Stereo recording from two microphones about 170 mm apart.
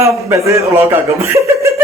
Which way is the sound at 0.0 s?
15° right (ahead or behind).